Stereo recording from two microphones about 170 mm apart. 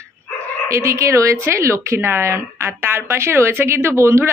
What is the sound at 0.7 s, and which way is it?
Speech, 15° right (ahead or behind).